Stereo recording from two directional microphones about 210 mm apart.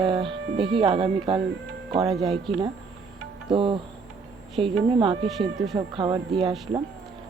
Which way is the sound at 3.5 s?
25° right (ahead or behind).